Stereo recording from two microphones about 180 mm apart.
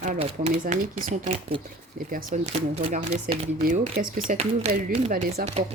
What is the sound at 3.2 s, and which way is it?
Speech, 50° right (ahead or behind).